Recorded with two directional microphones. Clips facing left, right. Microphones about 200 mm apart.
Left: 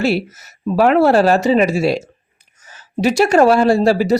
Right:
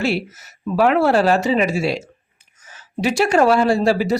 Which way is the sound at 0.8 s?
40° left (ahead or behind).